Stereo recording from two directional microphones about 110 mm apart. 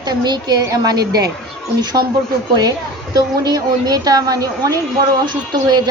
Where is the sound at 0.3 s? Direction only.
40° right (ahead or behind).